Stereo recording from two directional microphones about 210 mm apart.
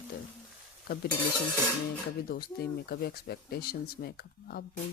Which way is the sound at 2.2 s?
45° left (ahead or behind).